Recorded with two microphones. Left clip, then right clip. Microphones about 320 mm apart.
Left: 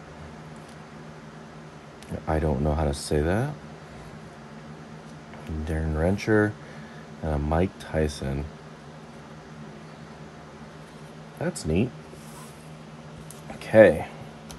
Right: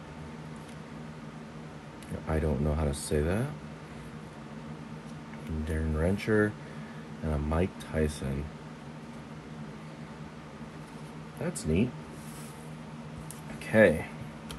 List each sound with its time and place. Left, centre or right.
2.2 s speech: left
5.7 s speech: left
11.7 s speech: left
13.7 s speech: left